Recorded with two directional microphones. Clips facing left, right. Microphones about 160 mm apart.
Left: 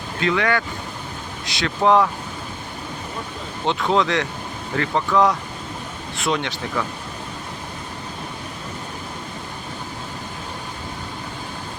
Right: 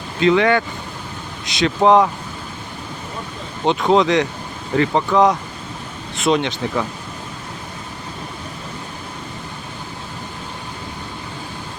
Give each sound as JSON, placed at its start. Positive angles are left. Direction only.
{"t": 0.2, "sound": "speech", "side_deg": -25}
{"t": 3.7, "sound": "speech", "side_deg": -20}